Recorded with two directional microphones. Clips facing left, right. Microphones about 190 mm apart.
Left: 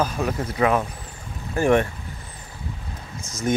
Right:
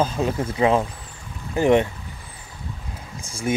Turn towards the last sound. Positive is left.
turn(degrees=-5)  # may be behind; listen again after turning